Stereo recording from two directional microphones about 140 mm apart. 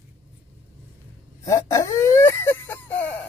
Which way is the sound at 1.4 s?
20° left (ahead or behind).